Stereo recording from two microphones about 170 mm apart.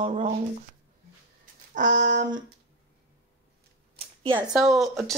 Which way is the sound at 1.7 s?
45° right (ahead or behind).